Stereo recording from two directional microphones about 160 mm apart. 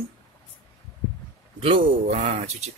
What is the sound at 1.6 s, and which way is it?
Speech, 35° right (ahead or behind).